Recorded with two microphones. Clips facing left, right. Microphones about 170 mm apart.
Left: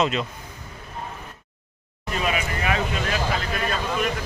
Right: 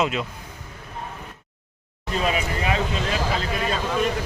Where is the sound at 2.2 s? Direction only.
30° right (ahead or behind).